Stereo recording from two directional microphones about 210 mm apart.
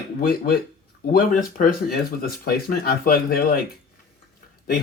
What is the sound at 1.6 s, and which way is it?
Speech, 45° left (ahead or behind).